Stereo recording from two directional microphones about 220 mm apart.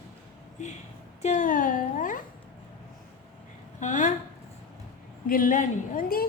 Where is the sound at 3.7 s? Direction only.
35° left (ahead or behind).